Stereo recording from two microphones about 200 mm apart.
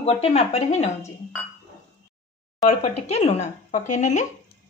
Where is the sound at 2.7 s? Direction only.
30° left (ahead or behind).